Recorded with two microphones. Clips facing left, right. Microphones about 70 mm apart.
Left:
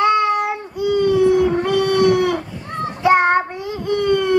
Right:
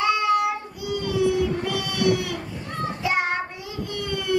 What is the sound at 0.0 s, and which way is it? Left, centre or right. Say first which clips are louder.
Baby cry: left 5 dB; left.